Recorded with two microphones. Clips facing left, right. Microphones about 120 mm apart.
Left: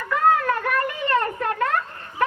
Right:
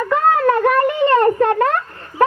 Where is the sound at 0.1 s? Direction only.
25° right (ahead or behind).